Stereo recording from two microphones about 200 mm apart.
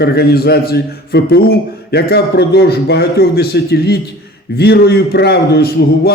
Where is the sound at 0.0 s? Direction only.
50° left (ahead or behind).